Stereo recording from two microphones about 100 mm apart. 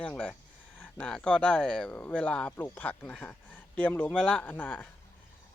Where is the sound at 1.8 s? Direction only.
15° left (ahead or behind).